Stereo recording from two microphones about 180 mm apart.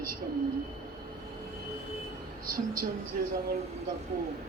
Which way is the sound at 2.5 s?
55° right (ahead or behind).